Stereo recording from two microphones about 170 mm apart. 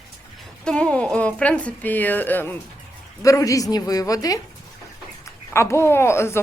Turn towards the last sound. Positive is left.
turn(degrees=15)  # may be behind; listen again after turning